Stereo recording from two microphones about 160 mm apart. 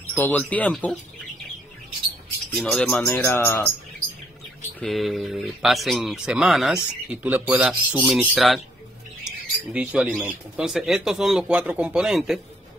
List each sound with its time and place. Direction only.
0.1 s speech: 10° left (ahead or behind)
2.5 s speech: 5° left (ahead or behind)
3.3 s speech: 15° left (ahead or behind)
4.7 s speech: centre (ahead or behind)
9.7 s speech: 5° right (ahead or behind)